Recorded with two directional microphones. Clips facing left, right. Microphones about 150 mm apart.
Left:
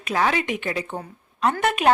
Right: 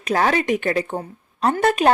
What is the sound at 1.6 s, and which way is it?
Speech, 35° right (ahead or behind).